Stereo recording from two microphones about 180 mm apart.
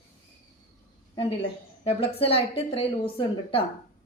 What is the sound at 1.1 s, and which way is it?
A woman's voice, 30° left (ahead or behind).